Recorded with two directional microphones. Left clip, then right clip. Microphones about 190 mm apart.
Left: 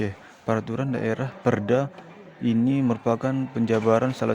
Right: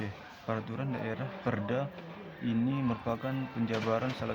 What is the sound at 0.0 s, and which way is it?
Speech, 50° left (ahead or behind).